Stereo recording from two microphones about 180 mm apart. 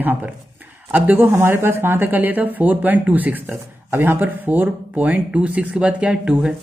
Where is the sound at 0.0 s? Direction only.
10° right (ahead or behind).